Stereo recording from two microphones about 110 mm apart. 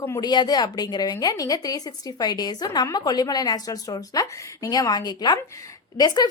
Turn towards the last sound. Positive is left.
turn(degrees=35)  # may be behind; listen again after turning